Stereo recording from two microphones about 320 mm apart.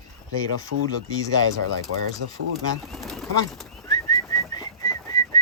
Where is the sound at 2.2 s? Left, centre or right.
Right.